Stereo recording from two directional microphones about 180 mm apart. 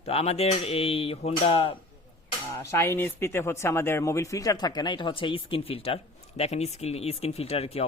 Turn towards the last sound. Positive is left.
turn(degrees=35)  # may be behind; listen again after turning